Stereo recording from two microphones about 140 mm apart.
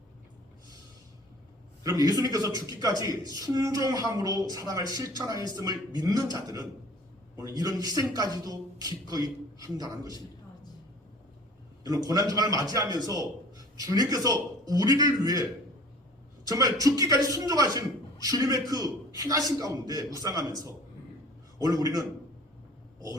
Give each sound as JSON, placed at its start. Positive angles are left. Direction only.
{"t": 1.8, "sound": "speech", "side_deg": -25}
{"t": 9.6, "sound": "speech", "side_deg": -25}
{"t": 11.8, "sound": "speech", "side_deg": -25}
{"t": 16.5, "sound": "speech", "side_deg": -25}